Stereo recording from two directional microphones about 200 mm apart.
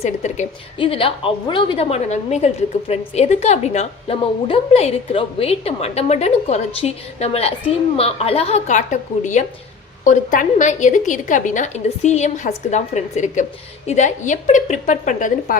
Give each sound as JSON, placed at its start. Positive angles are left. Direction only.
{"t": 0.0, "sound": "a woman's voice", "side_deg": 35}